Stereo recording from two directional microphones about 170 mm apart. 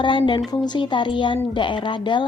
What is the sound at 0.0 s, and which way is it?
A woman's voice, 30° left (ahead or behind).